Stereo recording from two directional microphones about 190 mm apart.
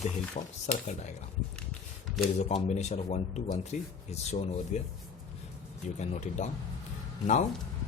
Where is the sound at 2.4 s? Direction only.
35° left (ahead or behind).